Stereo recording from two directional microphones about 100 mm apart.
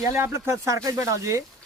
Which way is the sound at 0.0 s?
25° right (ahead or behind).